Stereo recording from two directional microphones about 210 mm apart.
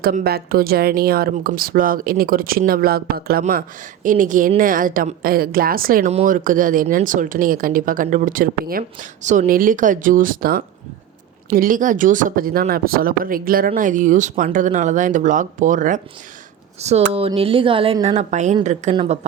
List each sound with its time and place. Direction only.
0.0 s speech: 45° right (ahead or behind)
17.1 s speech: 25° right (ahead or behind)